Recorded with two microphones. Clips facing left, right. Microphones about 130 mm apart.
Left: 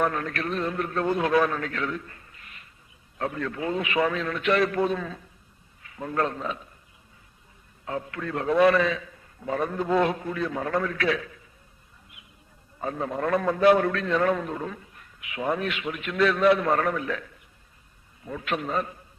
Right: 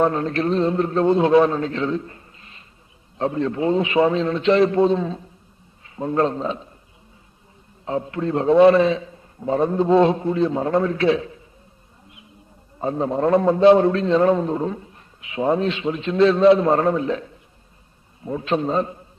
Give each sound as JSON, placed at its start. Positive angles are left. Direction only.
{"t": 0.0, "sound": "a man's voice", "side_deg": -25}
{"t": 7.8, "sound": "a man's voice", "side_deg": -25}
{"t": 12.7, "sound": "a man's voice", "side_deg": -25}